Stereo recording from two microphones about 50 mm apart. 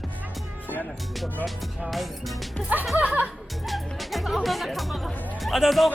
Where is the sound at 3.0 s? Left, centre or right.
Right.